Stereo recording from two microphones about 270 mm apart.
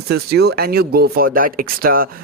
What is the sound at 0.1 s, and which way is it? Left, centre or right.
Speech, right.